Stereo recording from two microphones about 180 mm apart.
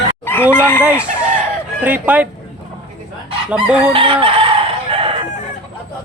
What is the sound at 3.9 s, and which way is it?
Chicken, 30° right (ahead or behind).